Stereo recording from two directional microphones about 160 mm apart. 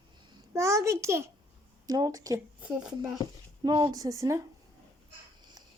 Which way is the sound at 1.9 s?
20° right (ahead or behind).